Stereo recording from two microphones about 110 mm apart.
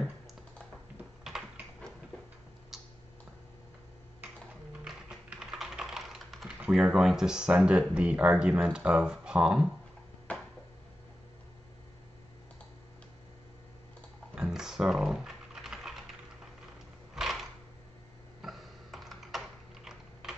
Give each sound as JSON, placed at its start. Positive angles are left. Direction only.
{"t": 1.2, "sound": "typing", "side_deg": -5}
{"t": 2.7, "sound": "typing", "side_deg": -5}
{"t": 4.8, "sound": "typing", "side_deg": -5}
{"t": 6.6, "sound": "speech", "side_deg": -5}
{"t": 10.3, "sound": "a sound", "side_deg": 10}
{"t": 14.3, "sound": "typing", "side_deg": -5}
{"t": 17.1, "sound": "a sound", "side_deg": 0}
{"t": 18.4, "sound": "typing", "side_deg": 0}